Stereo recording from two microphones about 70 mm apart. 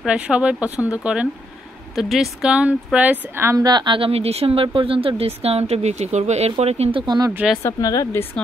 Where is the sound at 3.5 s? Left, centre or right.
Right.